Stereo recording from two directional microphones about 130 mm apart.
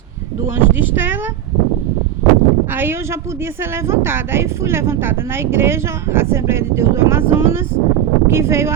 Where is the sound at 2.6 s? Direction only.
15° right (ahead or behind).